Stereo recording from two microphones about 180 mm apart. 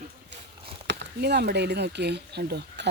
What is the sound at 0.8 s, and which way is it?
Speech, 70° right (ahead or behind).